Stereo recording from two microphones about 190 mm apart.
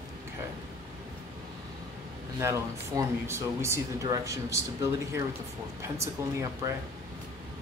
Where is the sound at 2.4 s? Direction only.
15° right (ahead or behind).